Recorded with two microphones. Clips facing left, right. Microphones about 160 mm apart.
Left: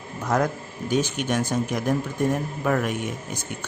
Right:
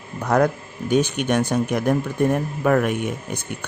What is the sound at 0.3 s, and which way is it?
Speech, 65° right (ahead or behind).